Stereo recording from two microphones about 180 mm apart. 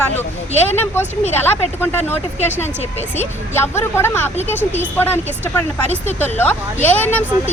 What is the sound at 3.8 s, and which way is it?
Speech, 15° left (ahead or behind).